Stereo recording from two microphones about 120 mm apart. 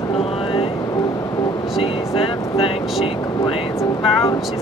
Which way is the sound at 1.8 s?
50° left (ahead or behind).